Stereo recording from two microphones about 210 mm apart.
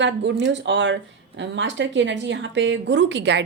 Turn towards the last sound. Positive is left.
turn(degrees=-60)  # may be behind; listen again after turning